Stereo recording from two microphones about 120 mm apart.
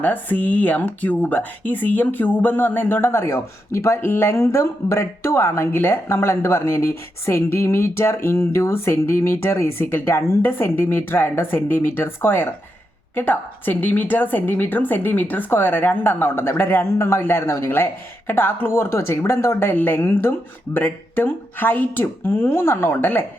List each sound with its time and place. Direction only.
0.0 s a woman's voice: 15° left (ahead or behind)